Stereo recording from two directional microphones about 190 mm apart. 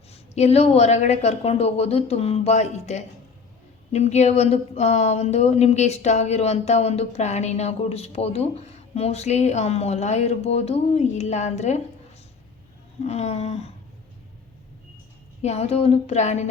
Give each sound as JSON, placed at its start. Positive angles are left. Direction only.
{"t": 0.1, "sound": "speech", "side_deg": 35}
{"t": 13.1, "sound": "speech", "side_deg": 35}
{"t": 15.4, "sound": "speech", "side_deg": 35}